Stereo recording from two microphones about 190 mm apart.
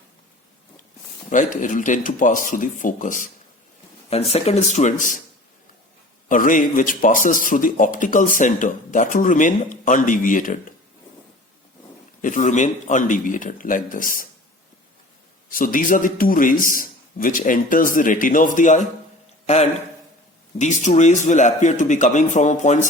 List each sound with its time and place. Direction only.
1.3 s a man's voice: 45° left (ahead or behind)
4.1 s speech: 35° left (ahead or behind)
6.2 s a man's voice: 45° left (ahead or behind)
12.2 s a man's voice: 40° left (ahead or behind)
15.4 s a man's voice: 45° left (ahead or behind)
20.6 s speech: 40° left (ahead or behind)